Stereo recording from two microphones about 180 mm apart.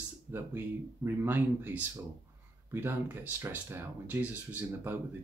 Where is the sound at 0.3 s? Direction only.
10° right (ahead or behind).